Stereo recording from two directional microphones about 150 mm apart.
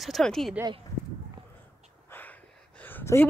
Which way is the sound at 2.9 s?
15° left (ahead or behind).